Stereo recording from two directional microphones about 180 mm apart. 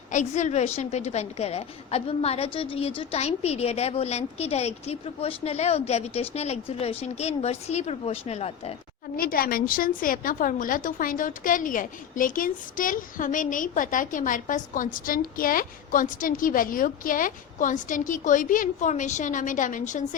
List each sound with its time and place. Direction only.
0.1 s a woman's voice: 40° left (ahead or behind)
9.1 s a woman's voice: 55° left (ahead or behind)